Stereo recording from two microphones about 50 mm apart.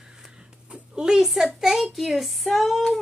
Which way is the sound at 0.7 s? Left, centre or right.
Centre.